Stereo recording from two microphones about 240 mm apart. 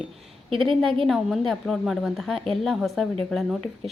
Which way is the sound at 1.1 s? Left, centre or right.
Centre.